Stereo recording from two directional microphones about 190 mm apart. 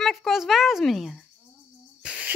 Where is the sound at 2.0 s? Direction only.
5° right (ahead or behind).